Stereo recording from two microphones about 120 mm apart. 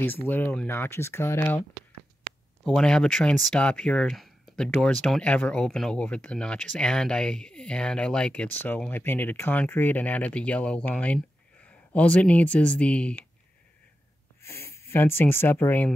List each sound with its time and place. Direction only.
0.0 s speech: 15° left (ahead or behind)
2.6 s speech: 5° left (ahead or behind)
14.4 s speech: 20° left (ahead or behind)